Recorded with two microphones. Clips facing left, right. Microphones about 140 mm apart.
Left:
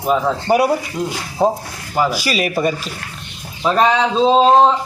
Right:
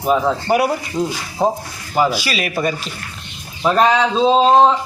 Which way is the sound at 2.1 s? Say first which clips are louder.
Left 3 dB; 45° left (ahead or behind).